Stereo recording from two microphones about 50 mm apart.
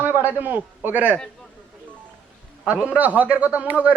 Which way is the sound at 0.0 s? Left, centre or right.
Right.